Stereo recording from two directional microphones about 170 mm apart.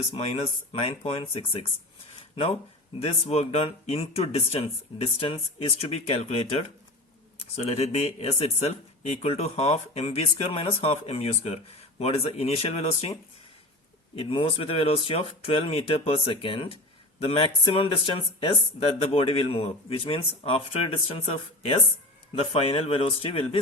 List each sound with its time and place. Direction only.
0.1 s speech: 40° left (ahead or behind)
14.2 s speech: 30° left (ahead or behind)